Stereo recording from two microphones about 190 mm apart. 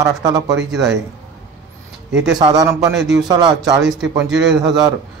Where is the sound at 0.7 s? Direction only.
5° right (ahead or behind).